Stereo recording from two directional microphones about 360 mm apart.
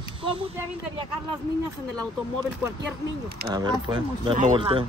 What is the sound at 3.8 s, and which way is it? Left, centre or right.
Speech, centre.